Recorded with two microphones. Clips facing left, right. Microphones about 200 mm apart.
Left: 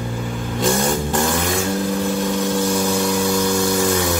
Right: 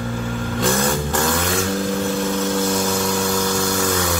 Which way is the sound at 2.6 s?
15° left (ahead or behind).